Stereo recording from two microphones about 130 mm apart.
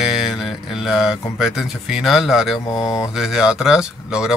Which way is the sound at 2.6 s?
35° left (ahead or behind).